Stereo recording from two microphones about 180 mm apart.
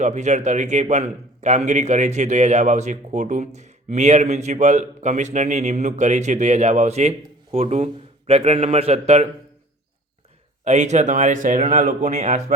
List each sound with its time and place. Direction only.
0.0 s a man's voice: 40° right (ahead or behind)
10.6 s a man's voice: 40° right (ahead or behind)